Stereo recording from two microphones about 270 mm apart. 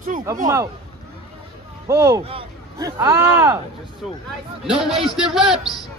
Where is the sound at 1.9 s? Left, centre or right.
Centre.